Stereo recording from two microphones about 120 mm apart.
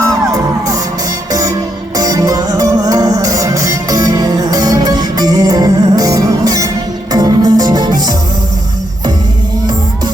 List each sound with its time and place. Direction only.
0.0 s music: 30° right (ahead or behind)